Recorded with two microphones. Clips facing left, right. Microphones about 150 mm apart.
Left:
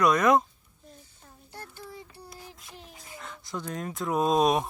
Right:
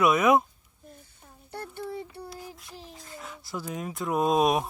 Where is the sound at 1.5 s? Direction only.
60° right (ahead or behind).